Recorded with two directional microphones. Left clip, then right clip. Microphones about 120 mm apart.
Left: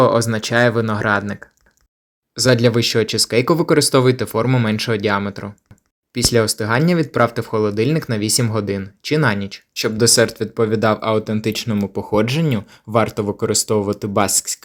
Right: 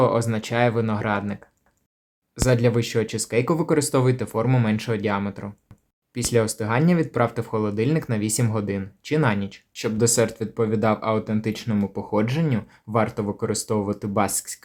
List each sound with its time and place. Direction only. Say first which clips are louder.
0.0 s speech: left 6 dB; 30° left (ahead or behind)